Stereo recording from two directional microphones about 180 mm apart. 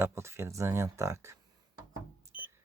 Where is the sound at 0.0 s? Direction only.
15° right (ahead or behind).